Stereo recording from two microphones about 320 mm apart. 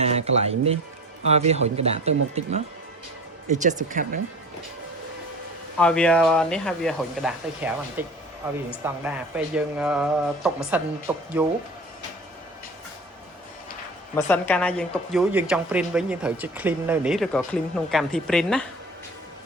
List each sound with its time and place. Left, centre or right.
0.3 s speech: centre
5.8 s speech: centre
14.2 s speech: centre